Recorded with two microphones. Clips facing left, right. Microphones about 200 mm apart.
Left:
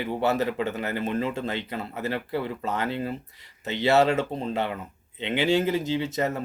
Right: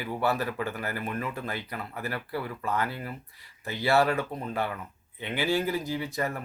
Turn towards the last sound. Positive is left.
turn(degrees=25)  # may be behind; listen again after turning